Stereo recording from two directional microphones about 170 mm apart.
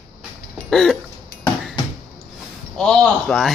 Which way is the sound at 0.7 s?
Centre (ahead or behind).